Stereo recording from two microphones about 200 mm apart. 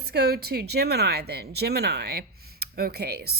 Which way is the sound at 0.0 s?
50° right (ahead or behind).